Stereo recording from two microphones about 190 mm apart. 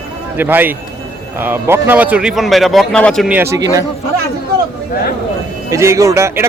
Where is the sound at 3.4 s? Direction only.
15° right (ahead or behind).